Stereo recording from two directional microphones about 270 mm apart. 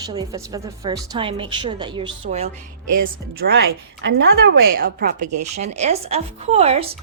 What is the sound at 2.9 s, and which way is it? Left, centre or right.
A woman's voice, right.